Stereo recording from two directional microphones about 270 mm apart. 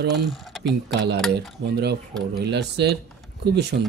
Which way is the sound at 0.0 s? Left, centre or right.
Right.